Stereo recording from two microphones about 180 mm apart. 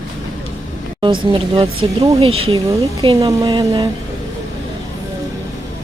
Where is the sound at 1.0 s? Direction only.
25° right (ahead or behind).